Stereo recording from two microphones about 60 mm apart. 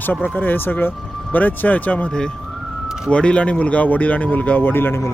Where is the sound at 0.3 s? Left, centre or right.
Left.